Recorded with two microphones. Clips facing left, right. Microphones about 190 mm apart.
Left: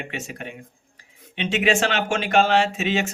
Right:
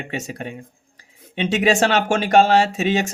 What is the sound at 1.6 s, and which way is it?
Speech, 40° right (ahead or behind).